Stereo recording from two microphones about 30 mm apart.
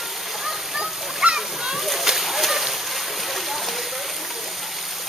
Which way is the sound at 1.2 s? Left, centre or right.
Right.